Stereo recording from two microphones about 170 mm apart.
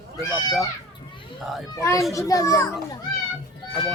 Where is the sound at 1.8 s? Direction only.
15° left (ahead or behind).